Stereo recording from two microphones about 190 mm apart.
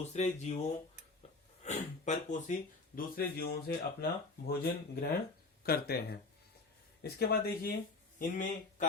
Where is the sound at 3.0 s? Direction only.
50° left (ahead or behind).